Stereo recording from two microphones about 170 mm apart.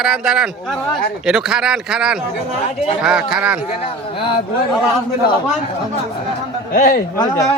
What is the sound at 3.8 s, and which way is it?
Speech, 30° left (ahead or behind).